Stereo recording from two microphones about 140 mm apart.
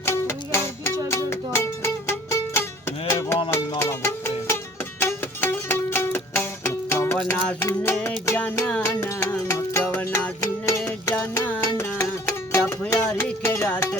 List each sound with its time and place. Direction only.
0.0 s music: 20° left (ahead or behind)